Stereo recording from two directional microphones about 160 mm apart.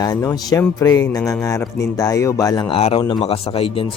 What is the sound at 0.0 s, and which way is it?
Speech, 20° left (ahead or behind).